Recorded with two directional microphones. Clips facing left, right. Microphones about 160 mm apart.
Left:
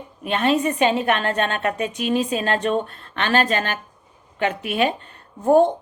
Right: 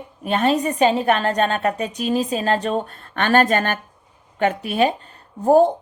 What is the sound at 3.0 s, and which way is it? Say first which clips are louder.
A woman's voice: right 7 dB; 45° right (ahead or behind).